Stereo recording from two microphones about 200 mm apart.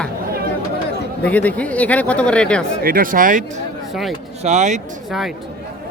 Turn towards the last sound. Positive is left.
turn(degrees=-35)  # may be behind; listen again after turning